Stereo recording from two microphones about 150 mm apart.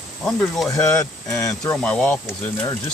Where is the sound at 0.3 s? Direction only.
5° left (ahead or behind).